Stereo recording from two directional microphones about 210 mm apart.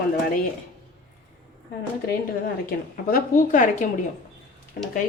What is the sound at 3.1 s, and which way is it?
Speech, 40° left (ahead or behind).